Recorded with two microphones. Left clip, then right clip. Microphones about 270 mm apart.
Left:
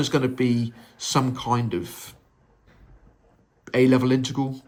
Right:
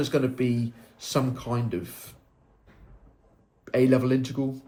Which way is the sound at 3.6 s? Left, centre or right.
Left.